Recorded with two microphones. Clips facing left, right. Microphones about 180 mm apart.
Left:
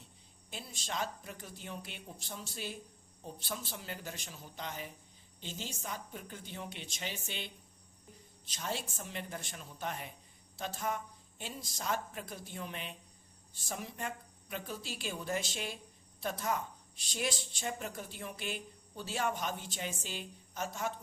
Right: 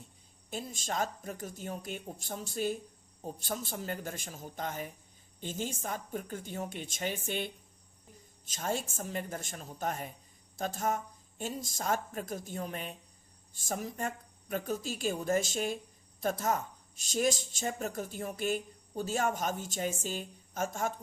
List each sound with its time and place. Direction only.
0.5 s a woman's voice: 45° right (ahead or behind)